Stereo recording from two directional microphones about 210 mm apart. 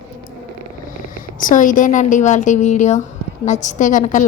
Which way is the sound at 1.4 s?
40° left (ahead or behind).